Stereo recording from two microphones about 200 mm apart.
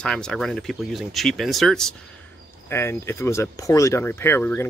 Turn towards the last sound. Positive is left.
turn(degrees=10)  # may be behind; listen again after turning